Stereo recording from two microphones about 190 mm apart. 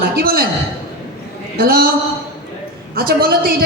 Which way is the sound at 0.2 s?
50° right (ahead or behind).